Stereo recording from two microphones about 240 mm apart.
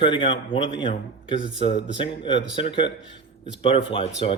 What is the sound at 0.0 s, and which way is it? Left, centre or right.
Speech, left.